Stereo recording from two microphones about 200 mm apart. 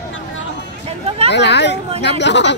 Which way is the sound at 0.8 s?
30° right (ahead or behind).